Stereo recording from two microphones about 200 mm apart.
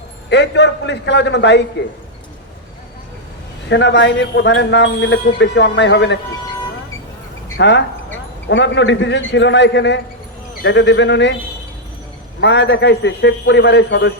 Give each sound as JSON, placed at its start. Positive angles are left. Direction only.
{"t": 0.3, "sound": "a man's voice", "side_deg": 60}
{"t": 3.7, "sound": "a man's voice", "side_deg": 60}
{"t": 7.6, "sound": "a man's voice", "side_deg": 60}
{"t": 12.4, "sound": "a man's voice", "side_deg": 60}